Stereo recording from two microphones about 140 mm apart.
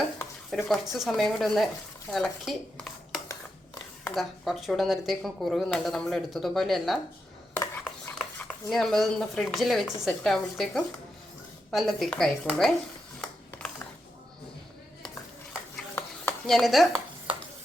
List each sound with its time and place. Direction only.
0.5 s speech: centre (ahead or behind)
2.0 s dishes: centre (ahead or behind)
4.1 s speech: centre (ahead or behind)
7.5 s cutlery: 20° left (ahead or behind)
8.2 s speech: 5° left (ahead or behind)
15.7 s a sound: 15° left (ahead or behind)
16.5 s speech: centre (ahead or behind)